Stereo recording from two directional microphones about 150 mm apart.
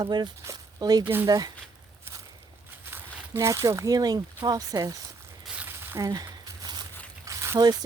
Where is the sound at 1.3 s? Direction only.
25° right (ahead or behind).